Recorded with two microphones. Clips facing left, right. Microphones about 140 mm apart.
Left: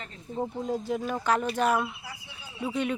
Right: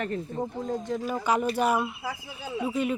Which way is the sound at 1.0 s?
10° right (ahead or behind).